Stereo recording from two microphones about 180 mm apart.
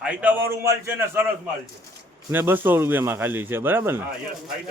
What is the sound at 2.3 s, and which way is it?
A man's voice, 10° right (ahead or behind).